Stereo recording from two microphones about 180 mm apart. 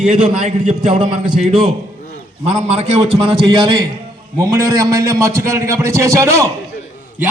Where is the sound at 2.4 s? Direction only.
35° right (ahead or behind); by 6.5 s 15° right (ahead or behind).